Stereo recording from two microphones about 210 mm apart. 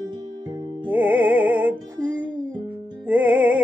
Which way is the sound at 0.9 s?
10° right (ahead or behind).